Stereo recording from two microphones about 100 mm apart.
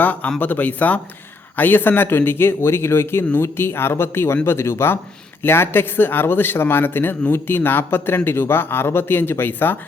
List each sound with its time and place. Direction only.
0.0 s a man's voice: 15° left (ahead or behind)